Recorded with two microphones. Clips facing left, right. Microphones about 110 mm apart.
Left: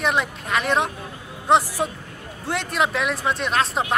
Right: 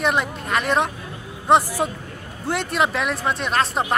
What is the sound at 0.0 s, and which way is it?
A man's voice, centre (ahead or behind).